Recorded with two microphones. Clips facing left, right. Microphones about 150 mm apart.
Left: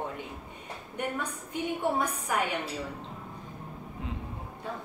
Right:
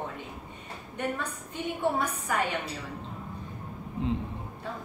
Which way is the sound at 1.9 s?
10° left (ahead or behind).